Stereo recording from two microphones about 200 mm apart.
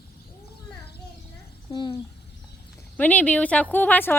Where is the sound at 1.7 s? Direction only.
20° left (ahead or behind).